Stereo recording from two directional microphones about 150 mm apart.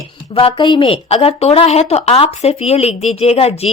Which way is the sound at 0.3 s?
35° left (ahead or behind).